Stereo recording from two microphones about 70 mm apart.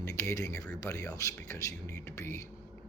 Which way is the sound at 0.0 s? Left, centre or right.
Left.